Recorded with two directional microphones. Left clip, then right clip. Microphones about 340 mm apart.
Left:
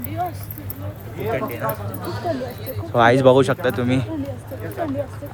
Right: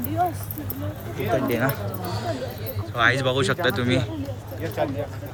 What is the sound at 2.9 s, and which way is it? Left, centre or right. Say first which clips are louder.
Speech: left 7 dB; centre.